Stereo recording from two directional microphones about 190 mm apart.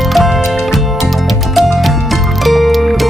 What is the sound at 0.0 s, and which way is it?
Music, centre (ahead or behind).